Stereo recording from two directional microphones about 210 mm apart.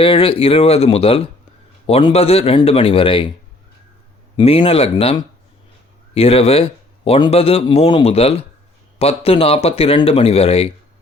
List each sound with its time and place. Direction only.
0.0 s a man's voice: 25° left (ahead or behind)
4.4 s a man's voice: 25° left (ahead or behind)
6.1 s a man's voice: 30° left (ahead or behind)